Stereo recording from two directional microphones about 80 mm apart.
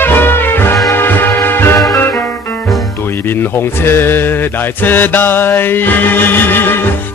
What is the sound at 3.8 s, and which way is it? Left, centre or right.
Music, left.